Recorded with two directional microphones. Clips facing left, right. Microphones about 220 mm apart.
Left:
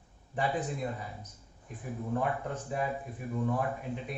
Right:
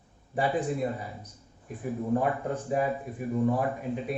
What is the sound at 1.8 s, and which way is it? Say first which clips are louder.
Speech: right 6 dB; 15° right (ahead or behind).